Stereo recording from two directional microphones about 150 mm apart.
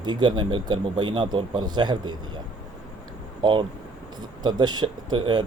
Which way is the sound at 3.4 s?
35° right (ahead or behind).